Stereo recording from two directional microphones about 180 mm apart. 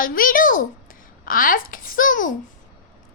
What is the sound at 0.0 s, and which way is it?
A child's voice, 50° left (ahead or behind).